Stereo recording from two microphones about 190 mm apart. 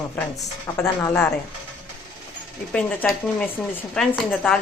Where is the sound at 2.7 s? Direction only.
5° left (ahead or behind).